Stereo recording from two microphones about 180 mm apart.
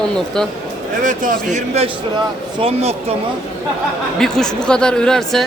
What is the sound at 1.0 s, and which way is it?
Speech, 45° right (ahead or behind).